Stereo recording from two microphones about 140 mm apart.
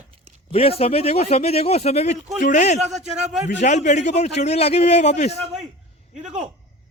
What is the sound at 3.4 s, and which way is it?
A man's voice, 60° left (ahead or behind).